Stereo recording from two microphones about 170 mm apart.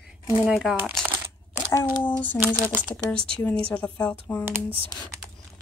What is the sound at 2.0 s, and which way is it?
Speech, 10° left (ahead or behind).